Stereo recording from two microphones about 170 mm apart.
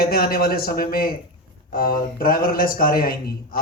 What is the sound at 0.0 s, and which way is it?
A man's voice, 60° left (ahead or behind).